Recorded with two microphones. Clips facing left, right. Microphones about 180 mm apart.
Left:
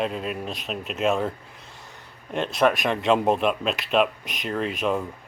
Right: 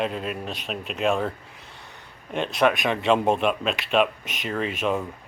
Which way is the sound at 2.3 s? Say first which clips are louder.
Even; centre (ahead or behind).